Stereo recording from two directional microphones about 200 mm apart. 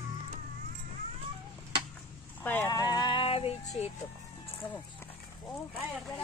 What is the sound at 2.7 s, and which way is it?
Music, 20° left (ahead or behind).